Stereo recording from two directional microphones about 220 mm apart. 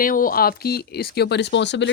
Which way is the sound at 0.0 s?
40° left (ahead or behind).